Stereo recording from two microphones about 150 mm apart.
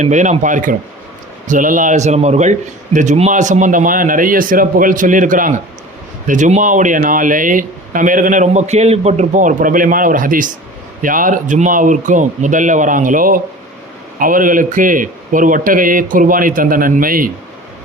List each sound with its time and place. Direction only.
0.0 s speech: 55° right (ahead or behind); by 17.3 s 70° right (ahead or behind)